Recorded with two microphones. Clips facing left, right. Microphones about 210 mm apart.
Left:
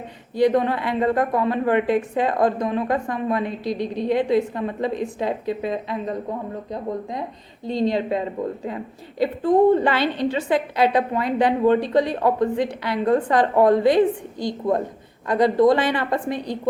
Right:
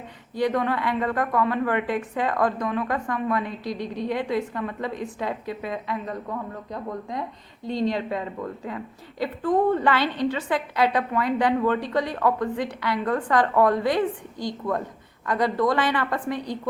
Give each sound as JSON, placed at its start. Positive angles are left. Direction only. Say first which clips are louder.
{"t": 0.3, "sound": "a woman's voice", "louder": "left 5 dB", "side_deg": 30}